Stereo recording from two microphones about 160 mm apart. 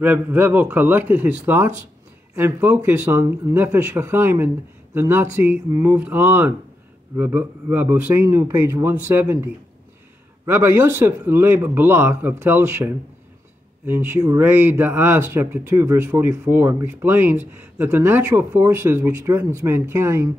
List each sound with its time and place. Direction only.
0.0 s speech: 10° right (ahead or behind)